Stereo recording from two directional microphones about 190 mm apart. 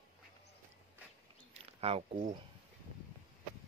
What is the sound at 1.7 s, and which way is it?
Speech, 30° right (ahead or behind).